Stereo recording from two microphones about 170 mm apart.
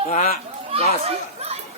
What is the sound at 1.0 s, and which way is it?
Chatter, 35° right (ahead or behind).